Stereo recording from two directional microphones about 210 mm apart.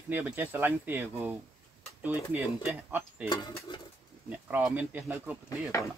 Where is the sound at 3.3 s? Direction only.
20° left (ahead or behind).